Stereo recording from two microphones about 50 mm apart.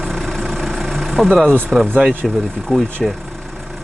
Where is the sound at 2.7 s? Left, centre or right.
Centre.